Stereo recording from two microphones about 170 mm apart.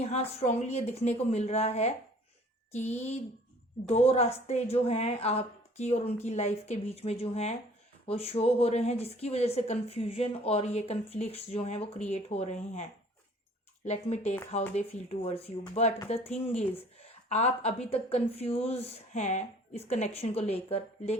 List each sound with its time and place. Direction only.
0.3 s a woman's voice: 40° left (ahead or behind)
3.8 s a woman's voice: 40° left (ahead or behind)
13.8 s a woman's voice: 40° left (ahead or behind)